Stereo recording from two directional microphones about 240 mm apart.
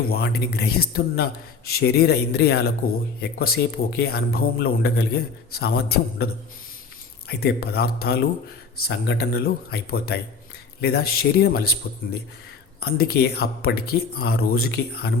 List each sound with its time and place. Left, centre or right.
0.0 s a man's voice: left
7.3 s a man's voice: left
12.8 s a man's voice: left